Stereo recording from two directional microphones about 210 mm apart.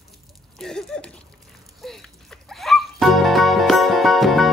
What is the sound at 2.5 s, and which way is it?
Music, centre (ahead or behind).